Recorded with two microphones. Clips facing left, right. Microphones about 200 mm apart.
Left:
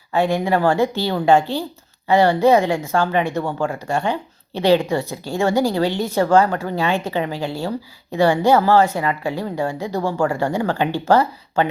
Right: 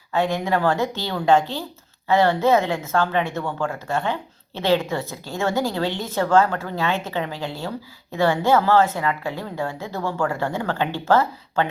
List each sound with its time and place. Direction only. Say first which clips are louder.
0.1 s a woman's voice: left 3 dB; 10° left (ahead or behind)
5.9 s a woman's voice: left 6 dB; 20° right (ahead or behind)
6.3 s a woman's voice: left 1 dB; 15° left (ahead or behind)